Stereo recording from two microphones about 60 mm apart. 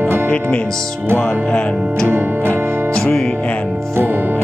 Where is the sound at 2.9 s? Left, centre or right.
Centre.